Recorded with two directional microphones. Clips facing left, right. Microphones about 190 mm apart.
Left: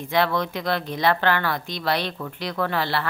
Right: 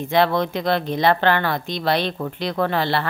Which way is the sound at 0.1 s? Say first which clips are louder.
Right 4 dB; 25° right (ahead or behind).